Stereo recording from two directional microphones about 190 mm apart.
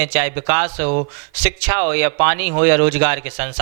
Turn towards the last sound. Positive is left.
turn(degrees=-15)  # may be behind; listen again after turning